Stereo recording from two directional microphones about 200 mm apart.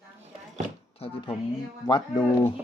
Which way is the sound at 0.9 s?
30° left (ahead or behind).